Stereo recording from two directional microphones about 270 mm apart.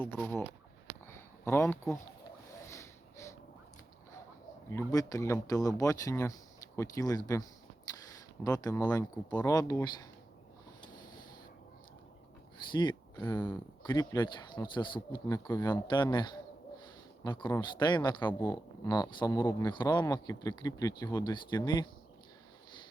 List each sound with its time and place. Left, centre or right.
0.0 s speech: centre
1.0 s a sound: centre
2.6 s snort: centre
4.7 s speech: centre
8.4 s speech: centre
10.8 s a sound: centre
12.7 s speech: centre